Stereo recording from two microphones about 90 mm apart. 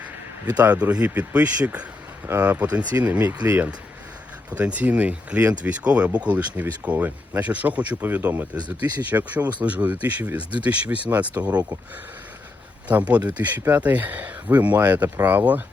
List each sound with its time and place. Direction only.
0.6 s speech: 15° right (ahead or behind)
12.9 s speech: 15° right (ahead or behind)